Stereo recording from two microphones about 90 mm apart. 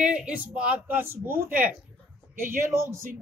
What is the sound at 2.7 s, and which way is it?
Speech, 30° right (ahead or behind).